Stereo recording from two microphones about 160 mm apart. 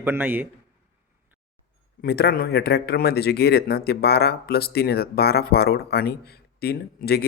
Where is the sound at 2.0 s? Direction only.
80° left.